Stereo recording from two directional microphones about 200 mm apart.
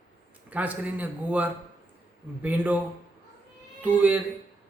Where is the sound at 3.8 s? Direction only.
10° right (ahead or behind).